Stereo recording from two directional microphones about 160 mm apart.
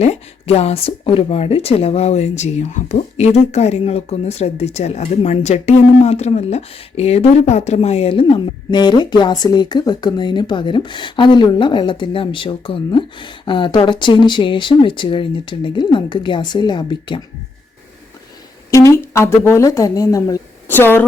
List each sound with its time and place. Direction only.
0.0 s speech: 40° left (ahead or behind)
18.7 s speech: 20° left (ahead or behind)